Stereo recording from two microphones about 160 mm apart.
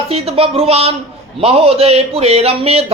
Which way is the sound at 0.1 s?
35° right (ahead or behind).